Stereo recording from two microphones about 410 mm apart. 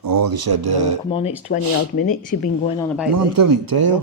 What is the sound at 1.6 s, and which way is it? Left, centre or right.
Speech, right.